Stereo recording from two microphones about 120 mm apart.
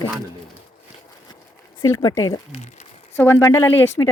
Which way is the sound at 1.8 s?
30° left (ahead or behind).